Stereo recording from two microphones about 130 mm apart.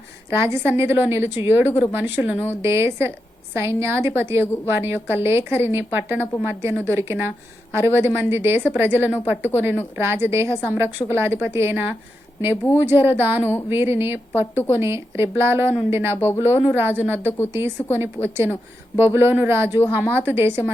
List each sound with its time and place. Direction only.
0.3 s a woman's voice: 20° right (ahead or behind)